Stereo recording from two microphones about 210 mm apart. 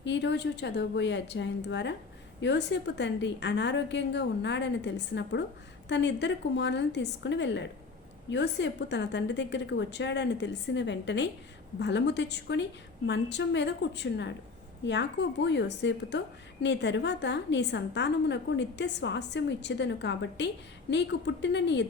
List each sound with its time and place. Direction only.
0.0 s a woman's voice: 55° left (ahead or behind)